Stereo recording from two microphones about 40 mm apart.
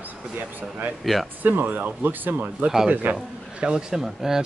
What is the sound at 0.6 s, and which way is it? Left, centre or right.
Speech, right.